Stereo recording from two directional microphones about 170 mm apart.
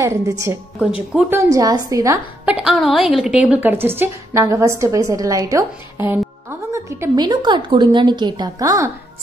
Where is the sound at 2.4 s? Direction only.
5° right (ahead or behind).